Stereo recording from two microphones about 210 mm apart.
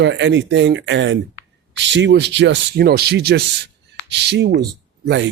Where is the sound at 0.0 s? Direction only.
60° right (ahead or behind).